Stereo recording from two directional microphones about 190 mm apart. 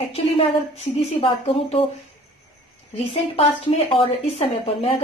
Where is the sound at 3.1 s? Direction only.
30° left (ahead or behind).